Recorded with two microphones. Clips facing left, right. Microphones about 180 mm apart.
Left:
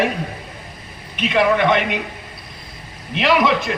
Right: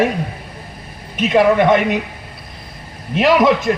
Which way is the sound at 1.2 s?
45° right (ahead or behind).